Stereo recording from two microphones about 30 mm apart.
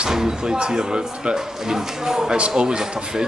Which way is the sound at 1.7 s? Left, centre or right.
Centre.